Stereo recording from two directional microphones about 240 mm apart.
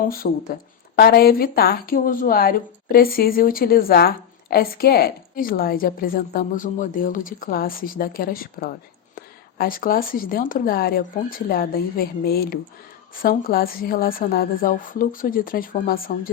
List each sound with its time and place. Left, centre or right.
0.0 s a woman's voice: left